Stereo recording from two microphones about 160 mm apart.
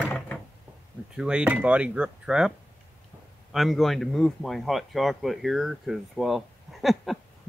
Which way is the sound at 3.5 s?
Centre (ahead or behind).